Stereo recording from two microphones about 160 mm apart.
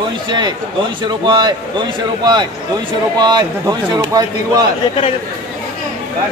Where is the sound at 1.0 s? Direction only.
30° right (ahead or behind).